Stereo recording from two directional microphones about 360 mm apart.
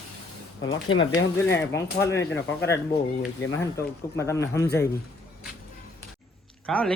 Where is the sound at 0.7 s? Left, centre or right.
Left.